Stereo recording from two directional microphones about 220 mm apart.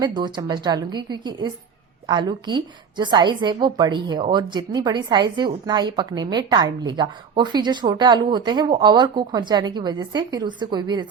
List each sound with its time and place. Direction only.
0.0 s a woman's voice: 20° right (ahead or behind)